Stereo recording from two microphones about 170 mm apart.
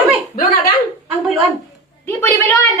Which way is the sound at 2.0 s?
10° left (ahead or behind).